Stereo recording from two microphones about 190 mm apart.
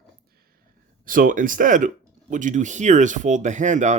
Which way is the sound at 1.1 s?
45° right (ahead or behind).